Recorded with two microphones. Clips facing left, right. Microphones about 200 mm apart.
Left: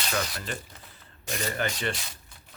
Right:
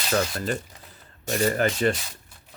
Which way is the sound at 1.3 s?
40° right (ahead or behind).